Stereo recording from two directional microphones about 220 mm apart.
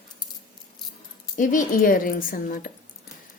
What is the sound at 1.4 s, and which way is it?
A woman's voice, 35° left (ahead or behind).